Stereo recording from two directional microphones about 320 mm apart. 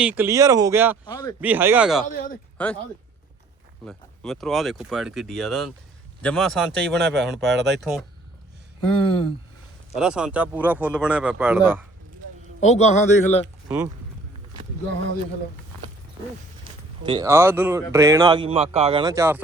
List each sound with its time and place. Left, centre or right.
0.0 s speech: centre
1.0 s speech: centre
1.4 s speech: centre
2.0 s a man's voice: left
2.6 s speech: centre
3.8 s speech: centre
9.0 s speech: centre
10.0 s speech: centre
12.6 s a man's voice: left
13.7 s speech: centre
17.0 s speech: centre